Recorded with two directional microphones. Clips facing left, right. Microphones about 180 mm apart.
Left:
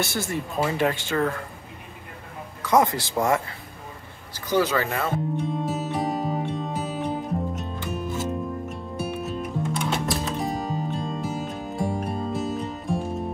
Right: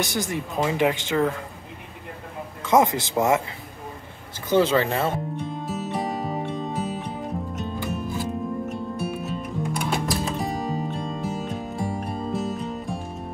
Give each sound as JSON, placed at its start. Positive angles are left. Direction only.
{"t": 0.0, "sound": "speech", "side_deg": -15}
{"t": 2.6, "sound": "speech", "side_deg": -20}
{"t": 4.5, "sound": "speech", "side_deg": -25}
{"t": 5.3, "sound": "music", "side_deg": 0}